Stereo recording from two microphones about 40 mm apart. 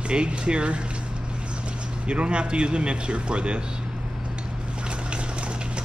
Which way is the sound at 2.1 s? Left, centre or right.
Right.